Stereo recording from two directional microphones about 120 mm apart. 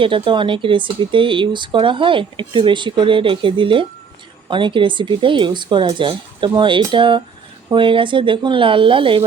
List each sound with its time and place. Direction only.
0.0 s speech: 45° right (ahead or behind)